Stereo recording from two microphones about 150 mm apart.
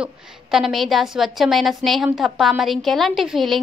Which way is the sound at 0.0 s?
Centre (ahead or behind).